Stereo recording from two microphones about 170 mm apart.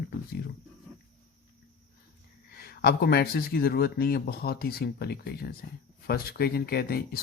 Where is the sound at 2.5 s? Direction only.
65° left (ahead or behind).